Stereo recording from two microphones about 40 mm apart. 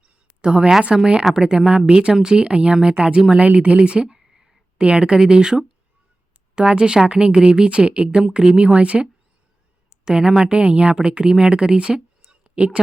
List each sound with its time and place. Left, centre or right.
0.0 s a sound: right
0.9 s speech: right
1.2 s speech: centre
1.5 s speech: right
3.4 s speech: right
3.7 s speech: right
4.2 s a sound: centre
4.8 s speech: right
9.9 s speech: centre